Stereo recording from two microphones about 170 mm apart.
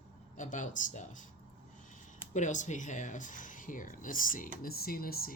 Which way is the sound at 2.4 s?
45° left (ahead or behind).